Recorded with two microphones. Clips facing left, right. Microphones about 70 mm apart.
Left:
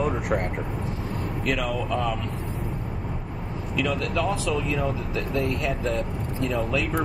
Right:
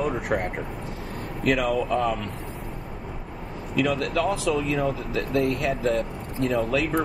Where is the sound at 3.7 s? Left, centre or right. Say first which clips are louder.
Right 2 dB; right.